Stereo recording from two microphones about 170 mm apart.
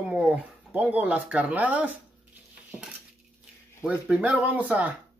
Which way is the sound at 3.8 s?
5° right (ahead or behind).